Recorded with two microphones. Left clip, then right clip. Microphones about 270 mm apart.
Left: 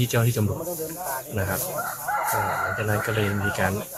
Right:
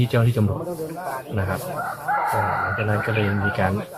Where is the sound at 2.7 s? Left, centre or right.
Centre.